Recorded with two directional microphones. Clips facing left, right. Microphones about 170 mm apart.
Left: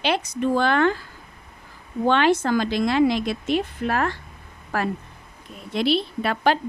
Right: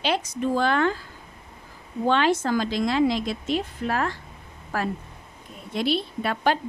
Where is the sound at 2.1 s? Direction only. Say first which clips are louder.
Left 2 dB; 70° left (ahead or behind).